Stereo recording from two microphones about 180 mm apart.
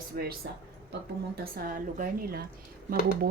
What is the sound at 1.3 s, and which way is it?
Speech, 55° right (ahead or behind).